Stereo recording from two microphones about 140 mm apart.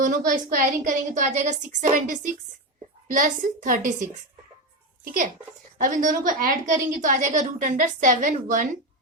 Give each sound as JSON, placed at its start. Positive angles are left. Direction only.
{"t": 0.0, "sound": "a woman's voice", "side_deg": -70}